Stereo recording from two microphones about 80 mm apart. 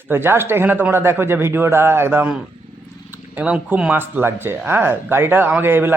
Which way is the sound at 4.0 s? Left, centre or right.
Right.